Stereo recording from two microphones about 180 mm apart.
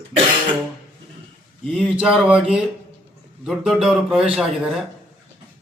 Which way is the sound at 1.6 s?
Centre (ahead or behind).